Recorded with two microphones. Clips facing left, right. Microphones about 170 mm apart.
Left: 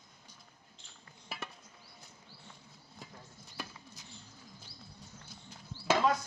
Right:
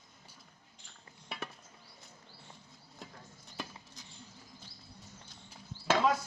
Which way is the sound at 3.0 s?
Centre (ahead or behind).